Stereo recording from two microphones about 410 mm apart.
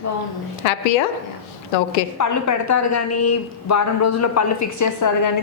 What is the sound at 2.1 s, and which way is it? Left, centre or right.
A woman's voice, left.